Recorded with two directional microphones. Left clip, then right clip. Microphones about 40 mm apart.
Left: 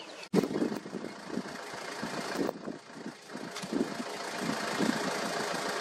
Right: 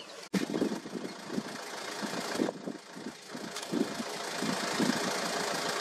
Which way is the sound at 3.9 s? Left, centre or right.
Right.